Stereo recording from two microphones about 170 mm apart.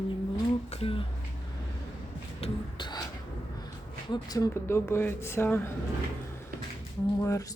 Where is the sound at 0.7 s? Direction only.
35° left (ahead or behind).